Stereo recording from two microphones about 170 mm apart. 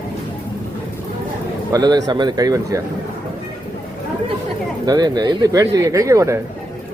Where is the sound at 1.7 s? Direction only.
20° right (ahead or behind).